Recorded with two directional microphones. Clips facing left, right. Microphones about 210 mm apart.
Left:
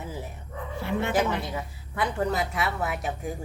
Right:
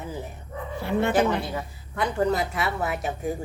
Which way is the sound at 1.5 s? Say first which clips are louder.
Right 2 dB; 5° left (ahead or behind).